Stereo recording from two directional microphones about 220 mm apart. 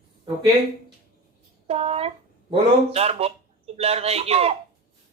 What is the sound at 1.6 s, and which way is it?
Speech, 25° right (ahead or behind).